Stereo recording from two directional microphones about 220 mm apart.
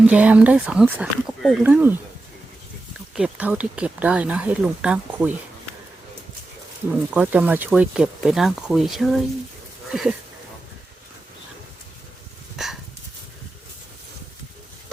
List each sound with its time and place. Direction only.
0.0 s speech: 5° right (ahead or behind)
3.2 s speech: 5° right (ahead or behind)
7.1 s speech: 10° right (ahead or behind)
12.6 s dog: centre (ahead or behind)